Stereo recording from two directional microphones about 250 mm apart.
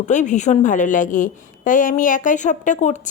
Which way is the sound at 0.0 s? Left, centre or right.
Left.